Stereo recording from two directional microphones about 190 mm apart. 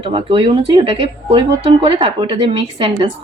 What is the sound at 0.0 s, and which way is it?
Speech, 30° right (ahead or behind).